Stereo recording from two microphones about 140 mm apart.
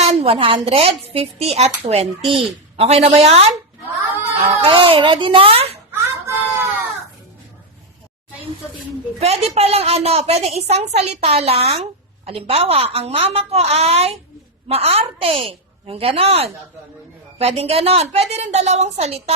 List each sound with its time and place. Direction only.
0.0 s a woman's voice: 50° right (ahead or behind)
4.5 s speech: 40° right (ahead or behind)
5.9 s a sound: 15° right (ahead or behind)
9.2 s a woman's voice: 45° right (ahead or behind)